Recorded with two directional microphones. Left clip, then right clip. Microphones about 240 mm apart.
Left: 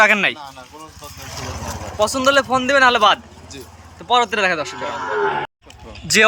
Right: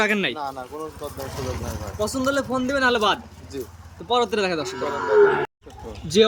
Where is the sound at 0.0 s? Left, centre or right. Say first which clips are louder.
Left 8 dB; centre.